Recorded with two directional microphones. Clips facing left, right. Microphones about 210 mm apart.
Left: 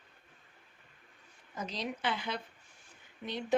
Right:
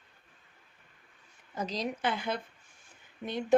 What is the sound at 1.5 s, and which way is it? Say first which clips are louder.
Speech: right 4 dB; 40° right (ahead or behind).